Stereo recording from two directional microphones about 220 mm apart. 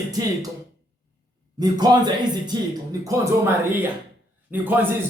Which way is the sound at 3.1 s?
10° right (ahead or behind).